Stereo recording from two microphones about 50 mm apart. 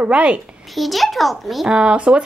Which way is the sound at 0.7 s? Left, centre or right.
Centre.